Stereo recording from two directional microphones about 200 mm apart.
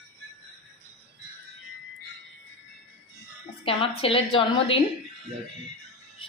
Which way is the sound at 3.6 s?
30° left (ahead or behind).